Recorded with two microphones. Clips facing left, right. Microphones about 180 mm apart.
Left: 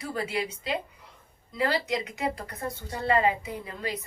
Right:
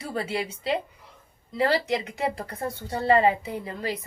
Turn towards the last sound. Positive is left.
turn(degrees=-30)  # may be behind; listen again after turning